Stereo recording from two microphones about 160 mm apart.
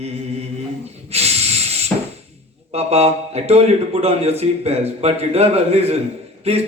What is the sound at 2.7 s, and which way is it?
A man's voice, 40° right (ahead or behind).